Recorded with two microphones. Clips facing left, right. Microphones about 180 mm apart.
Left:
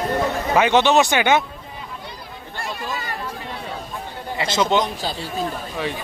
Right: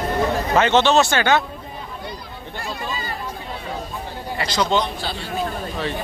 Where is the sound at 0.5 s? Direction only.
10° left (ahead or behind).